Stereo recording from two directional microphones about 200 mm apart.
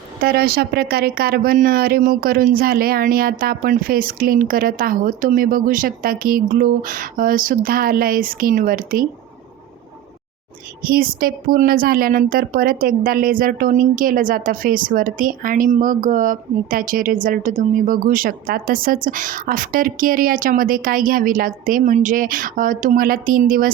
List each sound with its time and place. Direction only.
0.2 s speech: 50° right (ahead or behind)
10.8 s speech: 45° right (ahead or behind)